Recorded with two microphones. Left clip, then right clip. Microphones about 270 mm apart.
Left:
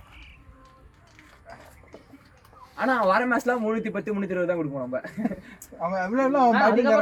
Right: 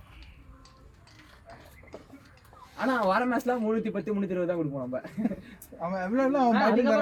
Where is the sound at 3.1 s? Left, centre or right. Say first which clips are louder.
Left 4 dB; left.